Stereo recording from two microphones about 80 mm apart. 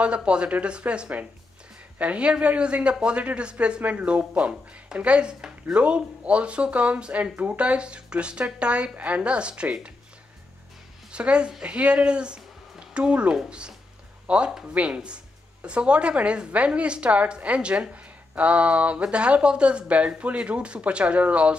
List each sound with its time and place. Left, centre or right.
0.0 s speech: centre
11.1 s speech: centre